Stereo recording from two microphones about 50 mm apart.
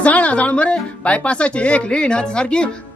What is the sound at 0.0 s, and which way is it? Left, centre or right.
A woman's voice, left.